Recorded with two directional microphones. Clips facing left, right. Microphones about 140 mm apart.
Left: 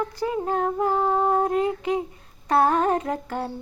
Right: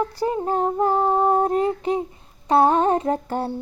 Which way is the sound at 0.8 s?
30° right (ahead or behind).